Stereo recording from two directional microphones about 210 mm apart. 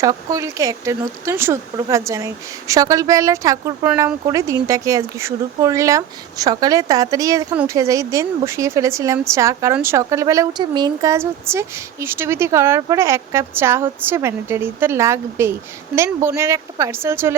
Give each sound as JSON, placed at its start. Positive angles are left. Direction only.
{"t": 0.0, "sound": "speech", "side_deg": -15}